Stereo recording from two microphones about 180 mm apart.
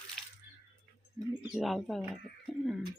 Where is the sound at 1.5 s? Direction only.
Centre (ahead or behind).